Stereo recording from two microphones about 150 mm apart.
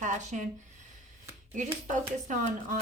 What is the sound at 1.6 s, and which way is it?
Speech, 55° right (ahead or behind).